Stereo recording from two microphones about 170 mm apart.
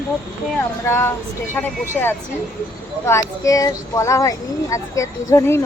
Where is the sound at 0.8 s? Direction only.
15° left (ahead or behind).